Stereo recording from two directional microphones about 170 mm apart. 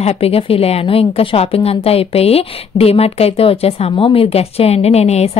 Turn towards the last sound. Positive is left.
turn(degrees=40)  # may be behind; listen again after turning